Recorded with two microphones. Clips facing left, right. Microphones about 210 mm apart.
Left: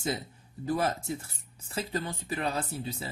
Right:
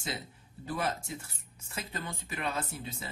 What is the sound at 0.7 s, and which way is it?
Speech, 40° left (ahead or behind).